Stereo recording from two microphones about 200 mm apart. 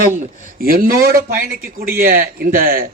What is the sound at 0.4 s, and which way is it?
A man's voice, 45° right (ahead or behind).